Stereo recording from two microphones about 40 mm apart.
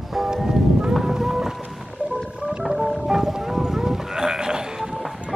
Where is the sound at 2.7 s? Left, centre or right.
Centre.